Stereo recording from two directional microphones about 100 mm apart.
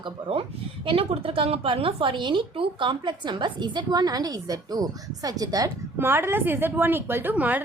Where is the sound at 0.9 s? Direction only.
70° right (ahead or behind); by 5.7 s 40° right (ahead or behind).